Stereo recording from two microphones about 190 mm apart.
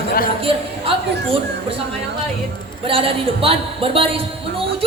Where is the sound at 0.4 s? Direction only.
30° right (ahead or behind).